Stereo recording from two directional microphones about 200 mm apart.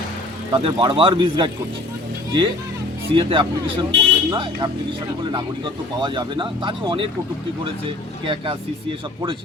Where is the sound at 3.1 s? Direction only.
25° right (ahead or behind).